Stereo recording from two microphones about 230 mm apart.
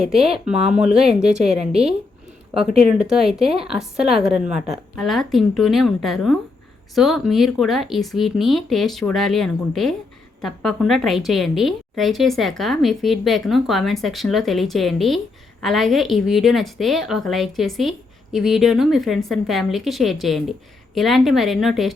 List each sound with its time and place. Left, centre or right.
0.4 s a woman's voice: centre
1.3 s a woman's voice: right
3.0 s a woman's voice: centre